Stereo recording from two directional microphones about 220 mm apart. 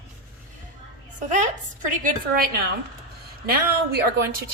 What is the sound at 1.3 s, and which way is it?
A woman's voice, 35° right (ahead or behind).